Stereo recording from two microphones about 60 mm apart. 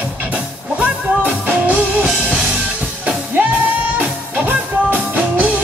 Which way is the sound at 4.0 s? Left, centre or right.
Right.